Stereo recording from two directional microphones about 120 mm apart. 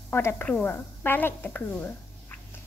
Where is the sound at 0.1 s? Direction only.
20° left (ahead or behind).